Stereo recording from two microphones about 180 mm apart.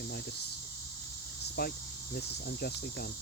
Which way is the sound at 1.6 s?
60° left (ahead or behind).